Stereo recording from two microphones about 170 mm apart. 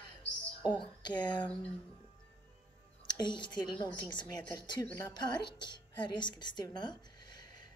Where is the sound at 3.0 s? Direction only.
25° left (ahead or behind).